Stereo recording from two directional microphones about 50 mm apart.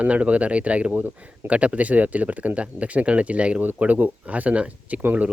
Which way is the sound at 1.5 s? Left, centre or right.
Right.